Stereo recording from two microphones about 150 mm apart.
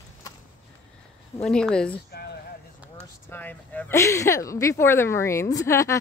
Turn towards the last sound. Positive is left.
turn(degrees=20)  # may be behind; listen again after turning